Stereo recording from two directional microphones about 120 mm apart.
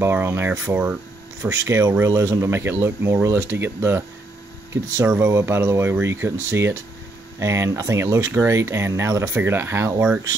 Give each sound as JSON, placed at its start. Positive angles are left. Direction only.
{"t": 0.0, "sound": "speech", "side_deg": -20}
{"t": 1.5, "sound": "speech", "side_deg": -25}